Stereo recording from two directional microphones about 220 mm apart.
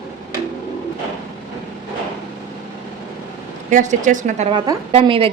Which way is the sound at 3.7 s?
35° right (ahead or behind).